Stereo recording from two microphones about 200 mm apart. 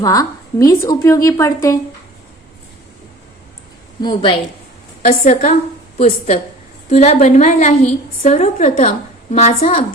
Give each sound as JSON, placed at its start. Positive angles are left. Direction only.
{"t": 0.0, "sound": "a woman's voice", "side_deg": 15}
{"t": 4.0, "sound": "a woman's voice", "side_deg": 25}
{"t": 5.0, "sound": "a woman's voice", "side_deg": 40}